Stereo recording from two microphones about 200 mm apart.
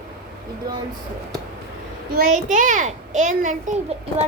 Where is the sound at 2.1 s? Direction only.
45° right (ahead or behind).